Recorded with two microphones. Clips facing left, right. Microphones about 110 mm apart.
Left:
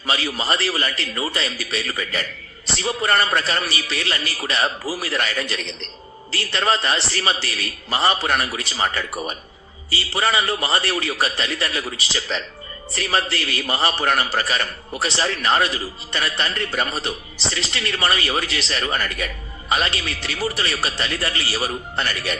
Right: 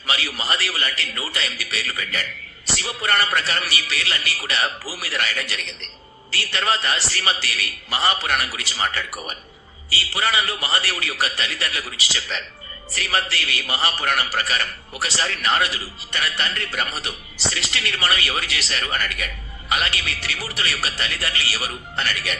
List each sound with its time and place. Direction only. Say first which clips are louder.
0.0 s a man's voice: left 3 dB; 30° left (ahead or behind)